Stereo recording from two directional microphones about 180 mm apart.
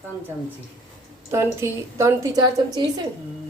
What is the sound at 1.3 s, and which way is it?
A woman's voice, 15° right (ahead or behind).